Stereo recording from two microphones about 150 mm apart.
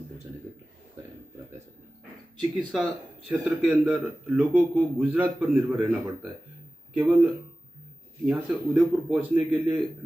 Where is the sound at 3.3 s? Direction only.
10° right (ahead or behind).